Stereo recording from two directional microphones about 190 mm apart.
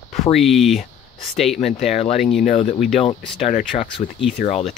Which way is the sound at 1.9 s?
35° left (ahead or behind).